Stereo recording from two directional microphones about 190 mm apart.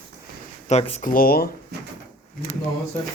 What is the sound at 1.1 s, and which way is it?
Speech, 50° left (ahead or behind).